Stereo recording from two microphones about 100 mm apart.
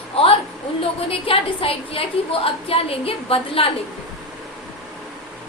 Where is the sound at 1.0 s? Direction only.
70° left (ahead or behind).